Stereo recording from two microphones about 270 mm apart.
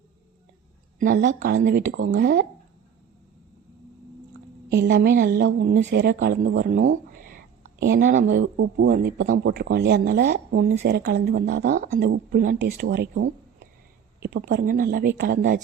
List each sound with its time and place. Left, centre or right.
0.9 s a woman's voice: right
4.7 s speech: right
7.1 s a sound: right
8.4 s a man's voice: right